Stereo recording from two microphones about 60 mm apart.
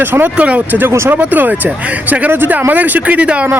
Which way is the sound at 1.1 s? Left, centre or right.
Right.